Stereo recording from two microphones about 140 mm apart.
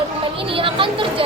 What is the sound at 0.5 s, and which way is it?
Speech, 40° right (ahead or behind).